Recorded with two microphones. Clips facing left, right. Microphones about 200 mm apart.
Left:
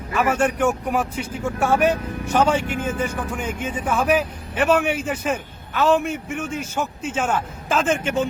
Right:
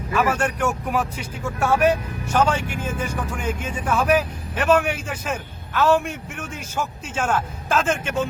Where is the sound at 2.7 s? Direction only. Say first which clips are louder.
Left 3 dB; 55° left (ahead or behind).